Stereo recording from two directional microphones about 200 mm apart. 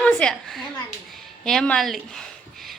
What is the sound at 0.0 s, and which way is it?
A woman's voice, 5° left (ahead or behind).